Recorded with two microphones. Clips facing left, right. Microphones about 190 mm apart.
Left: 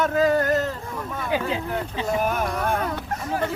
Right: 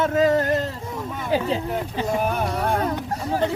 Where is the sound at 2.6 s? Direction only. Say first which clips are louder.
Right 3 dB; 35° right (ahead or behind).